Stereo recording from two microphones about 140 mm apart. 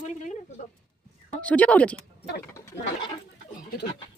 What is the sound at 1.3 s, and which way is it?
Speech, 10° left (ahead or behind).